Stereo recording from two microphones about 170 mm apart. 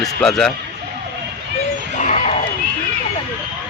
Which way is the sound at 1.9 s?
45° left (ahead or behind).